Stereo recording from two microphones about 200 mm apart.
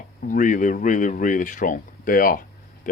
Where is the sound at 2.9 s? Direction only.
40° left (ahead or behind).